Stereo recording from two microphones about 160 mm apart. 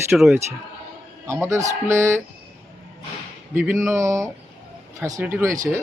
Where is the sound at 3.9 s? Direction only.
20° right (ahead or behind).